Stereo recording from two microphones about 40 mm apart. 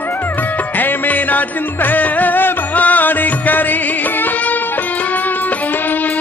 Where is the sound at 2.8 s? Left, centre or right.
Left.